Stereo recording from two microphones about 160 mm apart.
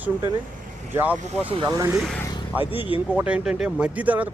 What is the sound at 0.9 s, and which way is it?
Speech, 10° right (ahead or behind).